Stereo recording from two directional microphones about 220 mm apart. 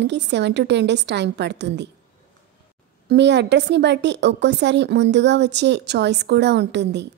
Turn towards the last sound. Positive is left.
turn(degrees=-50)  # may be behind; listen again after turning